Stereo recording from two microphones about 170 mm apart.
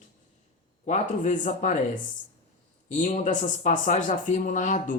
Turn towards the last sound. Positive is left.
turn(degrees=50)  # may be behind; listen again after turning